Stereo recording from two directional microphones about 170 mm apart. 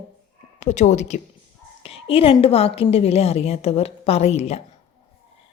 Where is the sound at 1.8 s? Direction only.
35° left (ahead or behind).